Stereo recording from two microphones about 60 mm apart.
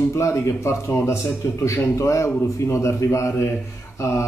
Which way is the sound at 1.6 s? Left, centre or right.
Left.